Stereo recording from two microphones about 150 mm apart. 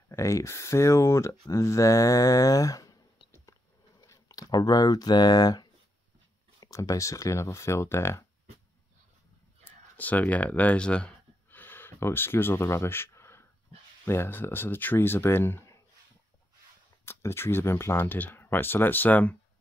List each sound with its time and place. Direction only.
0.1 s speech: 20° left (ahead or behind)
9.7 s a sound: 10° left (ahead or behind)
14.0 s speech: 15° left (ahead or behind)
17.0 s speech: 15° left (ahead or behind)